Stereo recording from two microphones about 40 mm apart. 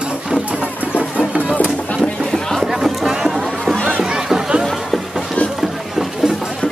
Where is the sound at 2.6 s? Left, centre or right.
Centre.